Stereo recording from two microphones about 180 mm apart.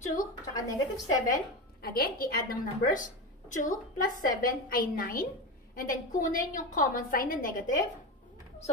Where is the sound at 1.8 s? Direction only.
55° left (ahead or behind).